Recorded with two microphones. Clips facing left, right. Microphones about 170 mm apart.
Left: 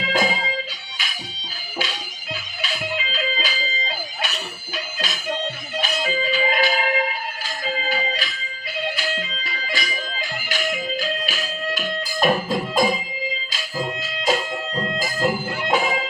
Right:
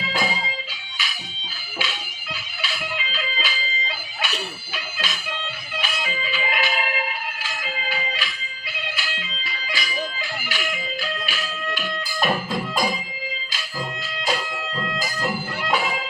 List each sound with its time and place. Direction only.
0.0 s music: 45° left (ahead or behind)
1.8 s music: 45° left (ahead or behind)
14.4 s music: 25° left (ahead or behind)
14.9 s music: 50° left (ahead or behind)